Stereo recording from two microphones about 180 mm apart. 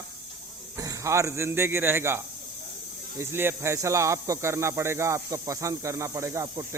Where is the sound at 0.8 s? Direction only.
20° right (ahead or behind).